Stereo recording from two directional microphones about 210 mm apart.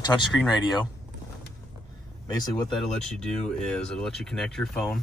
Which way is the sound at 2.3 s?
20° left (ahead or behind).